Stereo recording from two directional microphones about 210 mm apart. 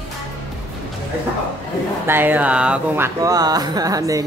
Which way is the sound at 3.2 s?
15° right (ahead or behind).